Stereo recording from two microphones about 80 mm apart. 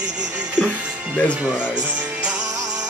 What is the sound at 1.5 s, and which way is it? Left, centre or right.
Speech, left.